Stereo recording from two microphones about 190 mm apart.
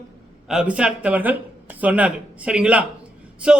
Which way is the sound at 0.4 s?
5° right (ahead or behind).